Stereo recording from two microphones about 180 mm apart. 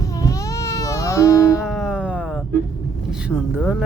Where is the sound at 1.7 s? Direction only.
5° right (ahead or behind).